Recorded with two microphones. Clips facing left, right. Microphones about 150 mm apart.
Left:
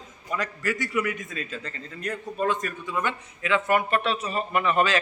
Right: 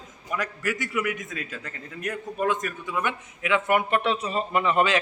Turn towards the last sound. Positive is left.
turn(degrees=-20)  # may be behind; listen again after turning